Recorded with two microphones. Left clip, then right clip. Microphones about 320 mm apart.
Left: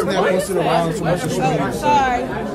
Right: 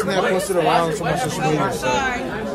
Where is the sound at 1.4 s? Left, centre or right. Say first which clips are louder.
Left 3 dB; centre.